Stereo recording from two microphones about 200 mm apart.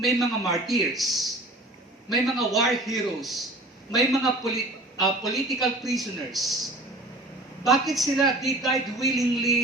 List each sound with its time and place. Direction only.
0.0 s a man's voice: centre (ahead or behind)
7.6 s a man's voice: centre (ahead or behind)